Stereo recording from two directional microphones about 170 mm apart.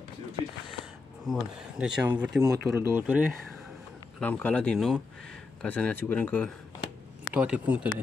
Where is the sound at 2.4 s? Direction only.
15° right (ahead or behind).